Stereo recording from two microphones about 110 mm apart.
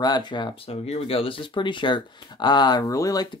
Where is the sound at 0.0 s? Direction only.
40° left (ahead or behind).